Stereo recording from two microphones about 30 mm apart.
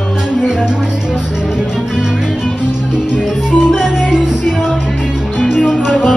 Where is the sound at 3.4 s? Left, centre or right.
Right.